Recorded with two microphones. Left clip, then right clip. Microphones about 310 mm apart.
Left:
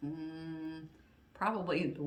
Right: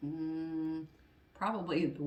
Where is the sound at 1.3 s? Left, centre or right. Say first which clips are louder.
Left 1 dB; centre.